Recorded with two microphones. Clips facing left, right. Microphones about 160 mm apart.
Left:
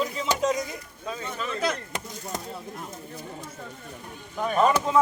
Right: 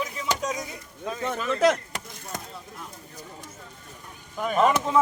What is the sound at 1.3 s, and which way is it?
Speech, 85° right.